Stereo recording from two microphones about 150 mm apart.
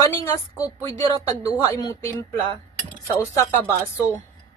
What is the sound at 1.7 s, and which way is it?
Speech, 20° left (ahead or behind).